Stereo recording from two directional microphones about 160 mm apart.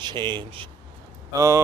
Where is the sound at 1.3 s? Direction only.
20° right (ahead or behind).